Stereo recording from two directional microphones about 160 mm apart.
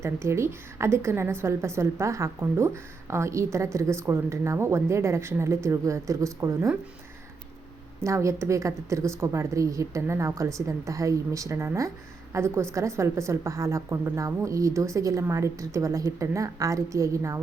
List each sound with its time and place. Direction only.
0.0 s a woman's voice: 15° right (ahead or behind)
8.0 s a woman's voice: 20° right (ahead or behind)